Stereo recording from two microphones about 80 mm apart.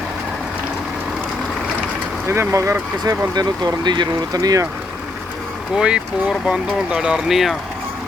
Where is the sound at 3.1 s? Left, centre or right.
Right.